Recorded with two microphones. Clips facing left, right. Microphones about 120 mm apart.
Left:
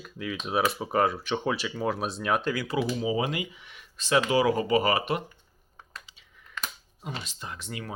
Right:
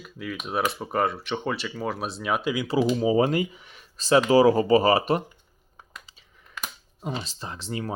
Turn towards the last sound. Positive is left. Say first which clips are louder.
# right 5 dB
turn(degrees=-30)  # may be behind; listen again after turning